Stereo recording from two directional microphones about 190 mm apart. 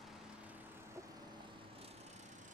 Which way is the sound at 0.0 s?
10° right (ahead or behind).